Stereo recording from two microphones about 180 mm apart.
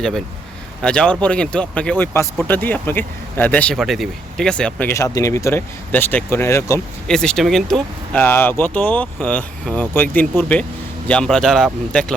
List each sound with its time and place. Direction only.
0.8 s speech: 5° left (ahead or behind)
7.1 s speech: 5° left (ahead or behind)